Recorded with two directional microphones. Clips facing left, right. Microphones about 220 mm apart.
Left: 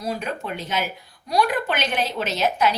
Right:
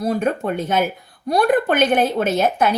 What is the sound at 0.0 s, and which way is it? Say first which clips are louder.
A woman's voice: right 8 dB; 50° right (ahead or behind).